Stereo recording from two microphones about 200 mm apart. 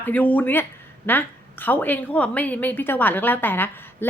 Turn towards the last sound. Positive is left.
turn(degrees=10)  # may be behind; listen again after turning